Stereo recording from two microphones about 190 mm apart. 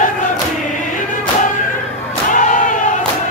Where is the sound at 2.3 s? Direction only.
40° left (ahead or behind).